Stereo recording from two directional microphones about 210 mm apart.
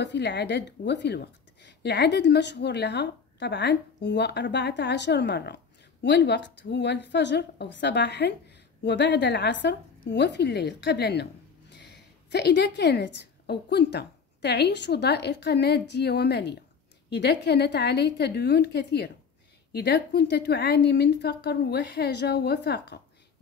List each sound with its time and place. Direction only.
0.0 s a woman's voice: 55° left (ahead or behind)